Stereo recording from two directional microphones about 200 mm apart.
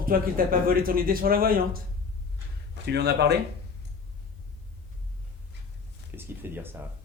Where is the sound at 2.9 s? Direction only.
55° right (ahead or behind).